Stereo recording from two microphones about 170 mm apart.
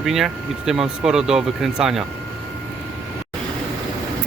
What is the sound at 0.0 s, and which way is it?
Speech, centre (ahead or behind).